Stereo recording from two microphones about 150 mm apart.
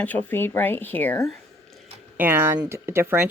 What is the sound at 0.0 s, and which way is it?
Speech, 10° left (ahead or behind).